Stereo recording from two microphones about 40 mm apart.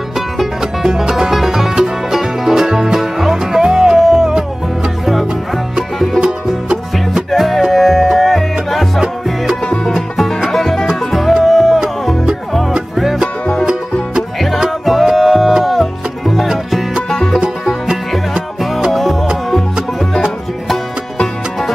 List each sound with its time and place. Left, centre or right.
0.6 s music: centre
5.0 s music: centre
6.2 s music: right
7.2 s music: centre
12.9 s music: centre
14.9 s music: centre
17.1 s music: centre
18.3 s music: centre
20.2 s music: centre